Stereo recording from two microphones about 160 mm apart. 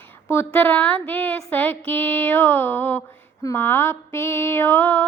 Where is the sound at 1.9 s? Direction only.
10° left (ahead or behind).